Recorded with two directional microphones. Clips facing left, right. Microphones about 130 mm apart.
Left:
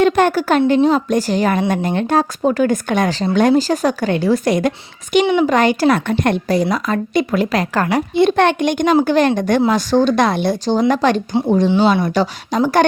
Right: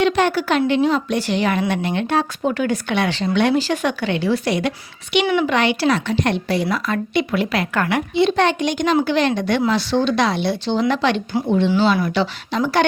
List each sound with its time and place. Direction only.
0.0 s a woman's voice: 45° left (ahead or behind)